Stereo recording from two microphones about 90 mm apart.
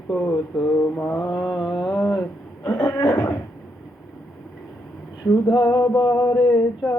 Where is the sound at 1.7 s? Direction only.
40° left (ahead or behind).